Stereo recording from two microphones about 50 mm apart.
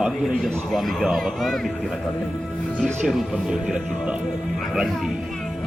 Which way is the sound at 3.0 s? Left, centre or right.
Centre.